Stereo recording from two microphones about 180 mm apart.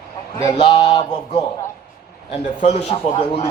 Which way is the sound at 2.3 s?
40° left (ahead or behind).